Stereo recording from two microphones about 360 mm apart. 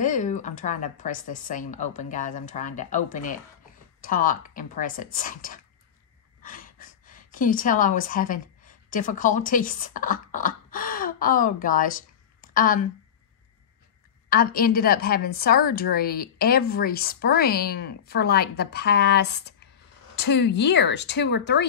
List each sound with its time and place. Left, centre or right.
0.0 s a woman's voice: left
14.3 s a woman's voice: left